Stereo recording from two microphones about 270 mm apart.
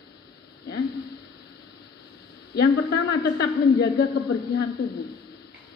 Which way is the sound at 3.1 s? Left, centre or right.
Left.